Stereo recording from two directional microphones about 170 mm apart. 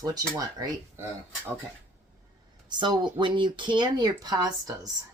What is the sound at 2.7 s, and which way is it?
Speech, 25° right (ahead or behind).